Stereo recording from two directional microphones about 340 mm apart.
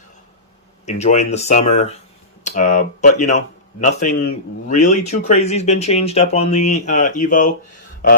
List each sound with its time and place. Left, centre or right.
0.9 s a man's voice: centre